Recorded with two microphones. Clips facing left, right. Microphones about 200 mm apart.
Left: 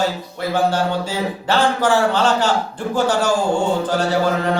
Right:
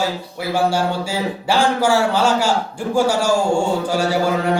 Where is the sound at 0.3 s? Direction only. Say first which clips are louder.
Even; 10° right (ahead or behind).